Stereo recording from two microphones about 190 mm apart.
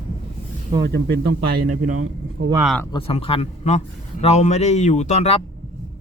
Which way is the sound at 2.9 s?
30° left (ahead or behind).